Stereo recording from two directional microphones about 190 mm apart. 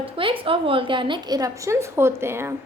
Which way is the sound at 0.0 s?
30° right (ahead or behind).